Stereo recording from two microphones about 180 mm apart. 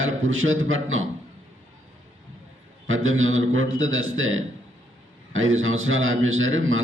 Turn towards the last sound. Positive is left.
turn(degrees=-90)